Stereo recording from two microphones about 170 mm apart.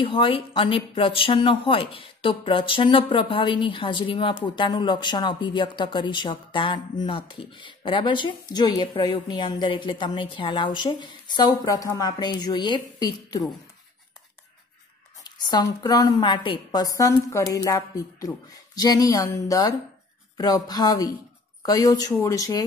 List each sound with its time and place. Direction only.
0.0 s speech: 30° left (ahead or behind)
15.2 s speech: 25° left (ahead or behind)